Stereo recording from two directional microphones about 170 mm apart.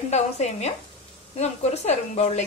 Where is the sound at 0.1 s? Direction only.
40° left (ahead or behind).